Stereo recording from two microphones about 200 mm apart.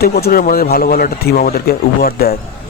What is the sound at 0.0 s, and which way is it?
Speech, 50° left (ahead or behind).